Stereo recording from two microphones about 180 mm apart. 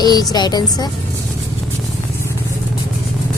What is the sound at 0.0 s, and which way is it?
Speech, 20° left (ahead or behind).